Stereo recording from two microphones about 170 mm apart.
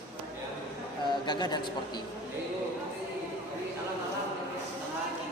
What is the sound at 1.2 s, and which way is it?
Speech, 25° left (ahead or behind).